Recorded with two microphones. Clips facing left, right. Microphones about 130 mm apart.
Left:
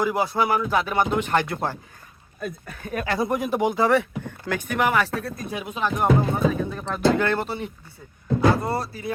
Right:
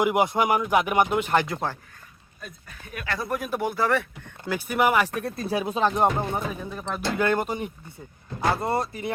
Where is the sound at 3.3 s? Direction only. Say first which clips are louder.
Left 3 dB; 15° left (ahead or behind).